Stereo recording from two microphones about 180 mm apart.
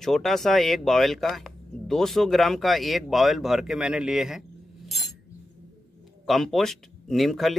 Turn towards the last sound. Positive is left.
turn(degrees=0)  # may be behind; listen again after turning